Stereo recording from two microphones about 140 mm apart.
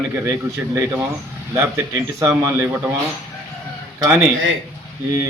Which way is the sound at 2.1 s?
20° right (ahead or behind).